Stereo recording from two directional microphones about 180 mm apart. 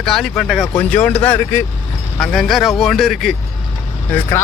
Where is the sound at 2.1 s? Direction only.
Centre (ahead or behind).